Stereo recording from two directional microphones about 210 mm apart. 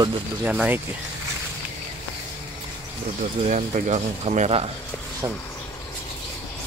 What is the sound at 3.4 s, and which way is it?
Speech, 35° right (ahead or behind).